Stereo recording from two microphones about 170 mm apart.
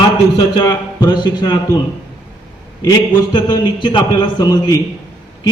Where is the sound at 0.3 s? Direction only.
25° left (ahead or behind).